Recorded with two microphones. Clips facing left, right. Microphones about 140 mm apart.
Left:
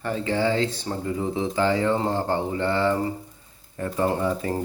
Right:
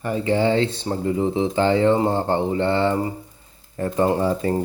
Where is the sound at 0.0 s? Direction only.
15° right (ahead or behind).